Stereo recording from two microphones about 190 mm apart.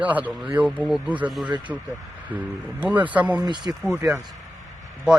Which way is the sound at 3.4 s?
20° right (ahead or behind).